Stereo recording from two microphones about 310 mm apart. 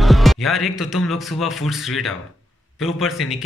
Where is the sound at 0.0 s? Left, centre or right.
Centre.